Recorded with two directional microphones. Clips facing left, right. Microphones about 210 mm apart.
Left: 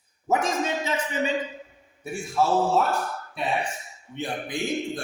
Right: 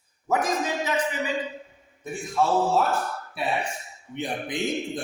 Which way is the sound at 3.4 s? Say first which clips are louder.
Even; 5° right (ahead or behind).